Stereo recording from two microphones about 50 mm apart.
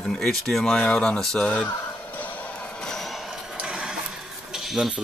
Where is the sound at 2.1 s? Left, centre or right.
Left.